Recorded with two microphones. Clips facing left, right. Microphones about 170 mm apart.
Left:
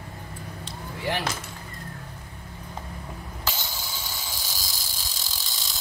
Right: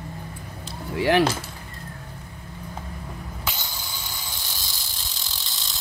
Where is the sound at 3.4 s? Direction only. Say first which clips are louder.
Left 2 dB; 5° left (ahead or behind).